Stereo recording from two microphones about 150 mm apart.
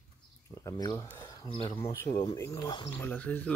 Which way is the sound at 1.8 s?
20° left (ahead or behind).